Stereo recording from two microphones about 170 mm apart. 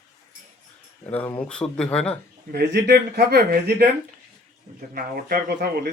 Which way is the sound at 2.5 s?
85° right.